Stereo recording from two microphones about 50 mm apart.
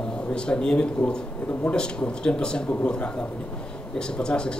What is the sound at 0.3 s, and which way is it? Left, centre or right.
A man's voice, centre.